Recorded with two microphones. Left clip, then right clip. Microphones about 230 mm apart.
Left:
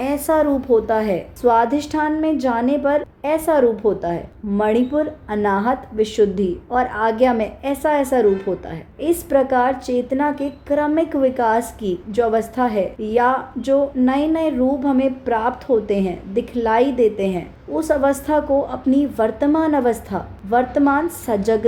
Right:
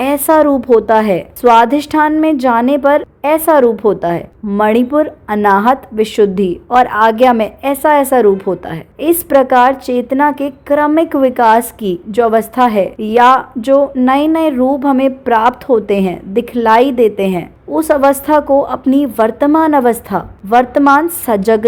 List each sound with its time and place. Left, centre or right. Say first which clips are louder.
0.0 s a woman's voice: right 8 dB; right